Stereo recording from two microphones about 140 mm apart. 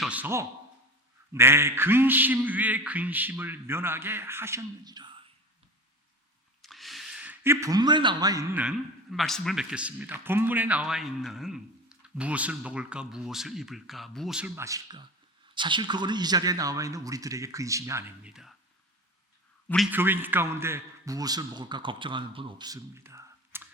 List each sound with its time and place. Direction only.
0.0 s a man's voice: 10° right (ahead or behind)
1.3 s a sound: 20° right (ahead or behind)
6.6 s a sound: centre (ahead or behind)
7.4 s a man's voice: 20° right (ahead or behind)
8.5 s a man's voice: 5° right (ahead or behind)
14.5 s a man's voice: 20° right (ahead or behind)
18.2 s a man's voice: 5° right (ahead or behind)
19.6 s a man's voice: 5° left (ahead or behind)
19.9 s a man's voice: 15° right (ahead or behind)